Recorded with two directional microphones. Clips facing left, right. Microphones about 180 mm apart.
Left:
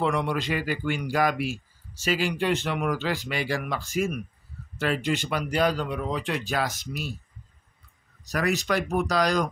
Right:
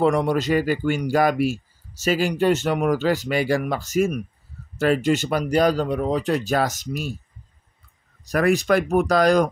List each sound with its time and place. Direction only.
0.0 s speech: 45° right (ahead or behind)
8.3 s speech: 50° right (ahead or behind)